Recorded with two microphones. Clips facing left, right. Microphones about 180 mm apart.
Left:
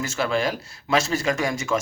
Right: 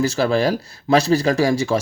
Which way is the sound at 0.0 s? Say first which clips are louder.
Right 6 dB; 35° right (ahead or behind).